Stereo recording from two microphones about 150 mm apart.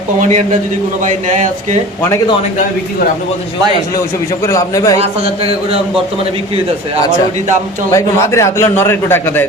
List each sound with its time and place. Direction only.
4.4 s a man's voice: 20° left (ahead or behind)
4.9 s speech: 40° right (ahead or behind)
7.9 s speech: 20° left (ahead or behind)